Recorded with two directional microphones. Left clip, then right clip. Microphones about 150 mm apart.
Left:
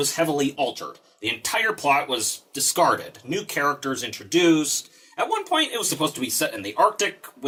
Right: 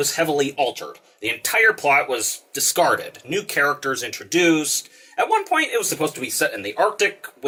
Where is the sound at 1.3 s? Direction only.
35° left (ahead or behind).